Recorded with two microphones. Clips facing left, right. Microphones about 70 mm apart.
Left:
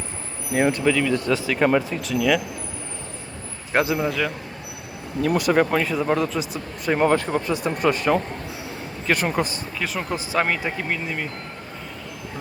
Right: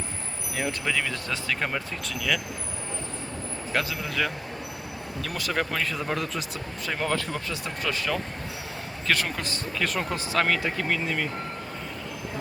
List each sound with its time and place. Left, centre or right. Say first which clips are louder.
0.9 s speech: left 9 dB; centre
3.7 s a man's voice: left 9 dB; left
5.4 s speech: left 7 dB; centre
6.8 s speech: left 9 dB; left
9.0 s speech: left 5 dB; centre